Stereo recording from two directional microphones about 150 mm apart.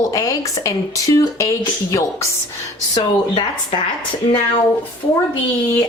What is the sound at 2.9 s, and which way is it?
Speech, 35° left (ahead or behind).